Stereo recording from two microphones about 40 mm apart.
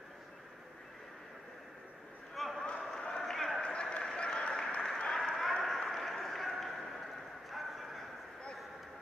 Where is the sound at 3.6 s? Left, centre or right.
Left.